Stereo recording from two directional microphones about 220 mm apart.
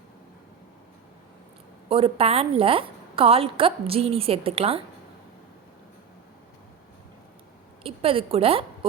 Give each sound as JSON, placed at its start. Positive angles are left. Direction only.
{"t": 1.9, "sound": "a woman's voice", "side_deg": -25}
{"t": 7.9, "sound": "a woman's voice", "side_deg": -25}